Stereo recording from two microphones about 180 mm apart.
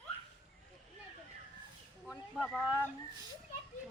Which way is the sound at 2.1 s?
5° left (ahead or behind).